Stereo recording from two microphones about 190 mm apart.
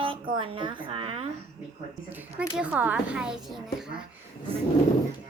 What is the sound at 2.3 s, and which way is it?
Speech, 5° right (ahead or behind).